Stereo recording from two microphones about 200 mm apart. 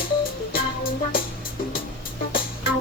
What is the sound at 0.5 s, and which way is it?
Music, 45° left (ahead or behind).